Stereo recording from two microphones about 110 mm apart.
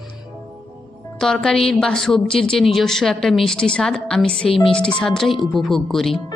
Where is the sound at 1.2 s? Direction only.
5° left (ahead or behind).